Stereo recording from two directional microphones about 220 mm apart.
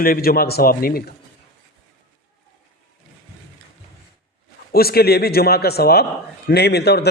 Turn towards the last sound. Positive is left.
turn(degrees=50)  # may be behind; listen again after turning